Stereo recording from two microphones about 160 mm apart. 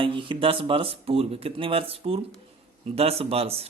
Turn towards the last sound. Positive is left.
turn(degrees=-40)  # may be behind; listen again after turning